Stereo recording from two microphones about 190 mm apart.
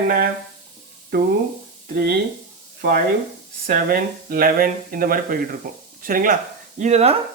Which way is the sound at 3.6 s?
50° right (ahead or behind).